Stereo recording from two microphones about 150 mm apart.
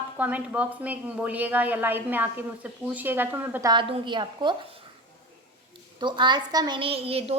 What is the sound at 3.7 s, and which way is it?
Speech, 35° right (ahead or behind).